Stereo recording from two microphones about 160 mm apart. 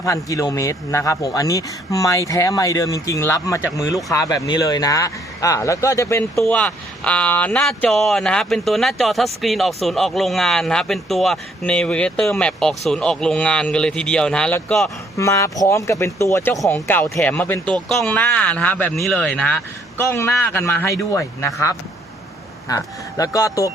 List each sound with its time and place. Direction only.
0.0 s a man's voice: 20° left (ahead or behind)
6.5 s a man's voice: 5° left (ahead or behind)